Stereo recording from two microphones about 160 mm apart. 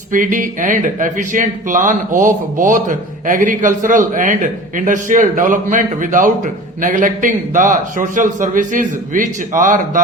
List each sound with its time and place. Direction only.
0.1 s a man's voice: 55° right (ahead or behind)